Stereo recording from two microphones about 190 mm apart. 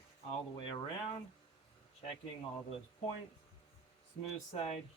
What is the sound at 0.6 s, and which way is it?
Speech, 25° left (ahead or behind).